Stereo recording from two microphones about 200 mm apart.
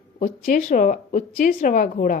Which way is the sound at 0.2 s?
40° left (ahead or behind).